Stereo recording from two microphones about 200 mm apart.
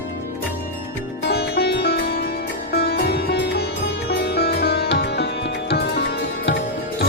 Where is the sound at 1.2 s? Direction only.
55° left (ahead or behind).